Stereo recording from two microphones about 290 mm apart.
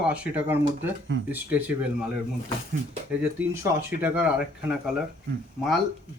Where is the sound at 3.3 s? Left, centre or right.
Centre.